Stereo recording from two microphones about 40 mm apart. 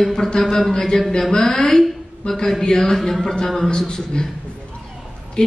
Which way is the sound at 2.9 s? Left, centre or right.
Centre.